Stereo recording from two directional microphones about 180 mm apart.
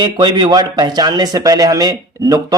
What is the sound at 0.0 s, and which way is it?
Speech, 25° right (ahead or behind).